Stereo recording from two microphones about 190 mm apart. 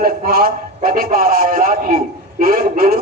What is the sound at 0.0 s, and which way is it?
Speech, 55° right (ahead or behind).